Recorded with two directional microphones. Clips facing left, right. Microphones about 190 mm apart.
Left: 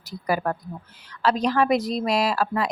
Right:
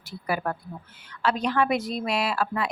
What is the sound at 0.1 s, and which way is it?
Speech, 40° left (ahead or behind).